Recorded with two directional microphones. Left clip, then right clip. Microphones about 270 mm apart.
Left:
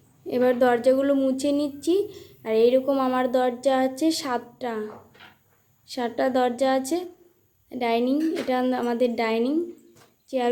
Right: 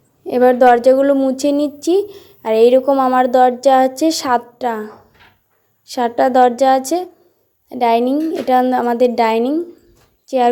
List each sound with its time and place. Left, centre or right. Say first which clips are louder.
0.3 s a woman's voice: right 10 dB; centre